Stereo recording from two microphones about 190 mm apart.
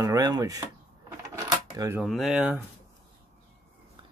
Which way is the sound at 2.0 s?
Centre (ahead or behind).